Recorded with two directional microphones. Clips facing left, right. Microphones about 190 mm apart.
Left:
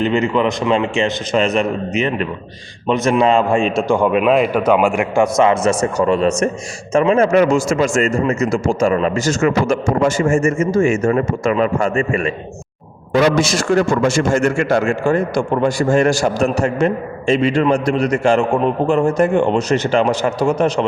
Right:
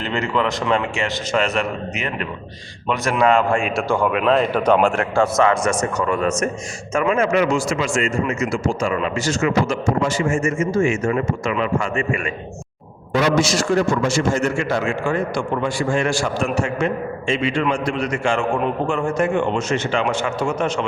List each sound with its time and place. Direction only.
0.0 s a man's voice: 20° left (ahead or behind); by 12.3 s 40° left (ahead or behind)
13.4 s a man's voice: 55° left (ahead or behind); by 20.8 s 35° left (ahead or behind)